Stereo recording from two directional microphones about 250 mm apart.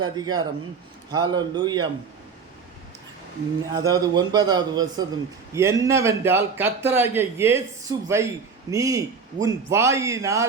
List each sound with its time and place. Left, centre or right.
0.0 s a man's voice: centre
3.7 s a man's voice: centre